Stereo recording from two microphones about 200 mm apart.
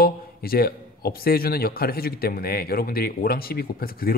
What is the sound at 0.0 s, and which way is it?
A man's voice, 50° left (ahead or behind).